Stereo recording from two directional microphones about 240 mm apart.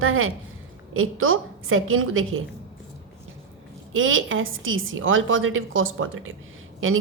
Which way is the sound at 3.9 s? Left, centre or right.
Right.